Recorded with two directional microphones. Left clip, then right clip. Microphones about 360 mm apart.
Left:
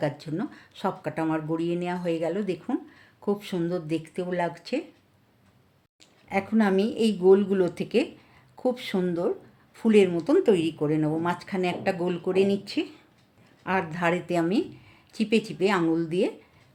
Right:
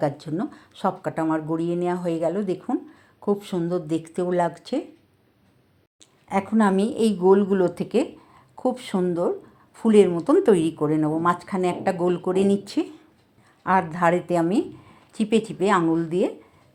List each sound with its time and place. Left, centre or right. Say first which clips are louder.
0.0 s speech: right 4 dB; centre
6.0 s speech: right 3 dB; centre